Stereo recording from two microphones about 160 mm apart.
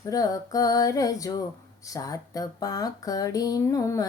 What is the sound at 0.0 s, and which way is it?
Speech, 20° left (ahead or behind).